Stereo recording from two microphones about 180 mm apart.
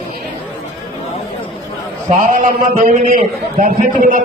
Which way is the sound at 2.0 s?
50° right (ahead or behind).